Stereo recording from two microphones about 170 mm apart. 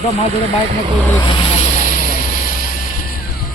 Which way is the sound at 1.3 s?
40° left (ahead or behind).